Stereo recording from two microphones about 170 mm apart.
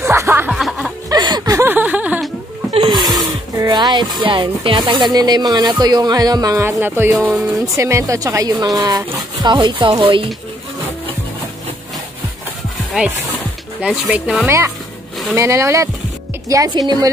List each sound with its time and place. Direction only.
0.0 s music: 15° right (ahead or behind)
0.5 s music: centre (ahead or behind)
1.0 s music: 25° right (ahead or behind); by 2.3 s 5° right (ahead or behind)
3.0 s speech: 20° right (ahead or behind)
12.9 s speech: 5° right (ahead or behind)
15.3 s speech: 15° right (ahead or behind)